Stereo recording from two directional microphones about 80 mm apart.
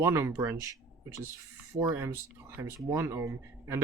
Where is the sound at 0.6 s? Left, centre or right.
Right.